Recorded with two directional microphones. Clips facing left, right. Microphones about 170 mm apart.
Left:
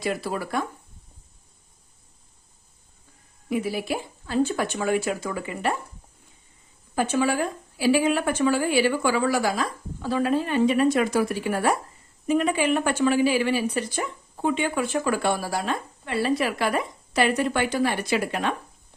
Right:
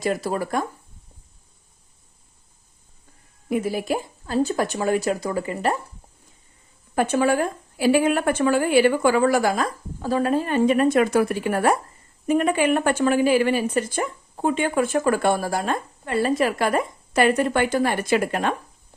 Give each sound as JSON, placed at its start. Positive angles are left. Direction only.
{"t": 0.0, "sound": "speech", "side_deg": -40}
{"t": 3.5, "sound": "speech", "side_deg": -45}
{"t": 6.9, "sound": "speech", "side_deg": -55}